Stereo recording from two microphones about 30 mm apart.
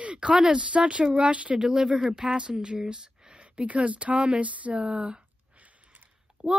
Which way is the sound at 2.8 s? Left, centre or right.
Right.